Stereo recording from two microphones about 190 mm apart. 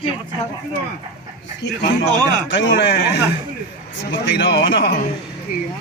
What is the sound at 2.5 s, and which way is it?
A man's voice, 65° left (ahead or behind).